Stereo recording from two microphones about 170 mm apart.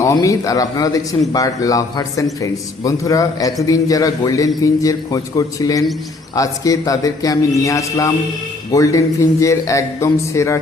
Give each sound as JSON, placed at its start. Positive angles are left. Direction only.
{"t": 0.0, "sound": "a man's voice", "side_deg": 20}